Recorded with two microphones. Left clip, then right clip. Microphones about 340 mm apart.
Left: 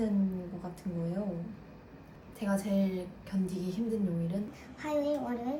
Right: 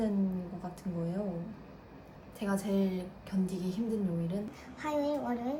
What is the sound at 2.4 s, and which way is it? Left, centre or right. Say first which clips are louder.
A woman's voice: left 1 dB; centre.